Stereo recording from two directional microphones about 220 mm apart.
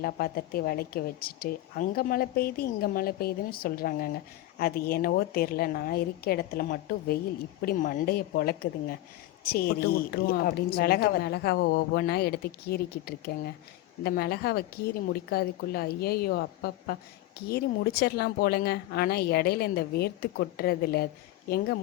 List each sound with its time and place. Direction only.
0.0 s a woman's voice: 45° left (ahead or behind)